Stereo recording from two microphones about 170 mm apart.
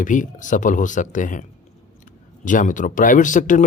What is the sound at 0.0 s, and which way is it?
Speech, 50° left (ahead or behind).